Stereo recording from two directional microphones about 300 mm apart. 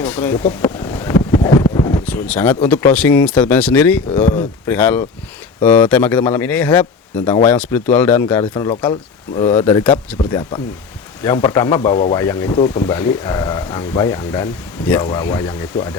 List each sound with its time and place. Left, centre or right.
0.1 s wind noise: centre
2.6 s speech: centre
10.2 s speech: centre